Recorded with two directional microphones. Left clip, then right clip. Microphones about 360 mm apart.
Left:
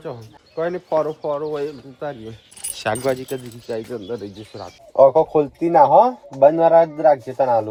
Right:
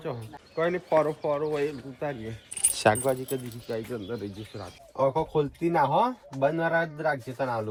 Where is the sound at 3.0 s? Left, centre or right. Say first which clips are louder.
Left 6 dB; left.